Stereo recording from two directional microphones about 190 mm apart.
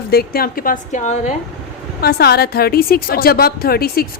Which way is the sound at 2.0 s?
55° left (ahead or behind).